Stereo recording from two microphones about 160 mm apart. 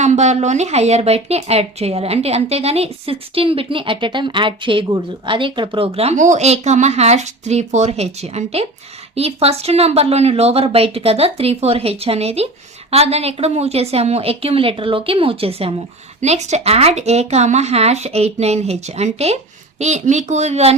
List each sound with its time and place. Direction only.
0.0 s speech: 45° right (ahead or behind)